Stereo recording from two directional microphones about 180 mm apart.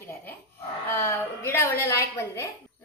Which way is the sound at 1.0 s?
15° left (ahead or behind).